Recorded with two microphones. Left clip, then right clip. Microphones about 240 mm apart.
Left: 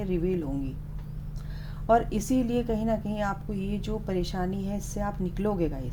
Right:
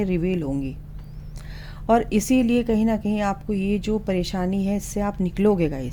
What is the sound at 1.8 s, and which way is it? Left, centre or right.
A woman's voice, right.